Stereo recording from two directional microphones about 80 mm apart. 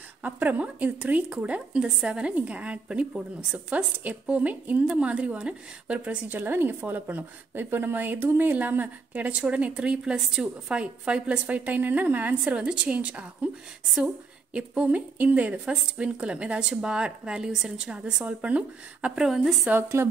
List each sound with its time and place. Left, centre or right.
0.2 s a woman's voice: right
19.2 s a woman's voice: centre
19.7 s speech: right